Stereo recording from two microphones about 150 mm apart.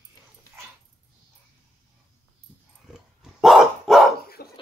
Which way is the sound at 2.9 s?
Centre (ahead or behind).